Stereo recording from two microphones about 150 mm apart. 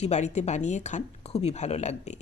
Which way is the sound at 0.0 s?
50° left (ahead or behind).